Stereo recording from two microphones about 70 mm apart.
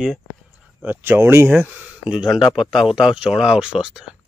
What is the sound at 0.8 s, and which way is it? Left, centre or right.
Speech, right.